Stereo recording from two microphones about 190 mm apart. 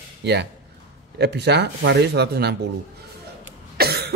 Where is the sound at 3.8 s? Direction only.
55° right (ahead or behind).